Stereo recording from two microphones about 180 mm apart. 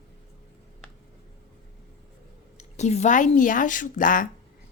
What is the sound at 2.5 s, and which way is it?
A woman's voice, 40° left (ahead or behind).